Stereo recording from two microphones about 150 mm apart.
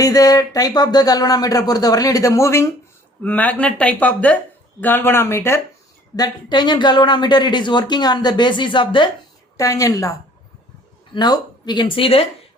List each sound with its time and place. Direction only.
0.0 s speech: 25° left (ahead or behind)
6.1 s speech: 25° left (ahead or behind)
9.6 s speech: 20° left (ahead or behind); by 12.2 s 35° left (ahead or behind)